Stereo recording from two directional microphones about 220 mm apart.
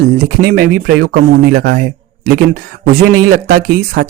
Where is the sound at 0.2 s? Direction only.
40° right (ahead or behind).